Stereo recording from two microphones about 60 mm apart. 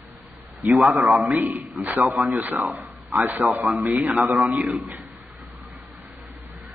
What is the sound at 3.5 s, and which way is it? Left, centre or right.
Speech, right.